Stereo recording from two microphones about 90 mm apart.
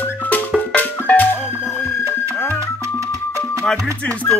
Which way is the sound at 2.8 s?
35° right (ahead or behind).